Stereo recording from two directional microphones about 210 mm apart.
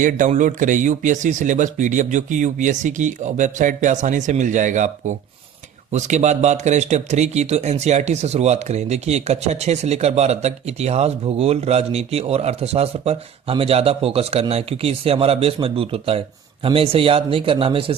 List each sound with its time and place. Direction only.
0.0 s speech: 35° right (ahead or behind)